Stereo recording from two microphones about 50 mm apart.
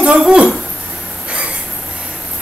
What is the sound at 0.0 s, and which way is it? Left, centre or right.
Speech, centre.